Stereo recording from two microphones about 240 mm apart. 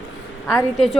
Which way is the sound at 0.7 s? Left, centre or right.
Centre.